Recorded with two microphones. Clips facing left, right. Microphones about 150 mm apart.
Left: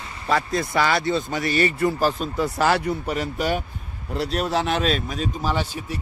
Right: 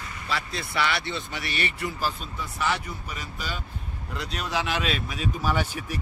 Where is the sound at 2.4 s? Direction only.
75° left (ahead or behind).